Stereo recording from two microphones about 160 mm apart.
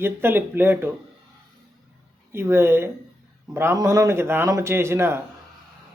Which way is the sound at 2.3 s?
15° right (ahead or behind).